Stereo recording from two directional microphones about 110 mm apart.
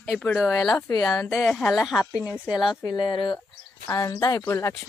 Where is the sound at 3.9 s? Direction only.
35° left (ahead or behind).